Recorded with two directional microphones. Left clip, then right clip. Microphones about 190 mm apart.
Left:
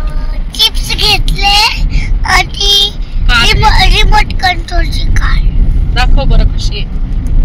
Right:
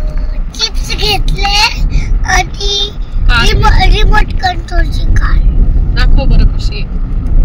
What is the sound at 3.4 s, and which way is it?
Vehicle, 10° right (ahead or behind).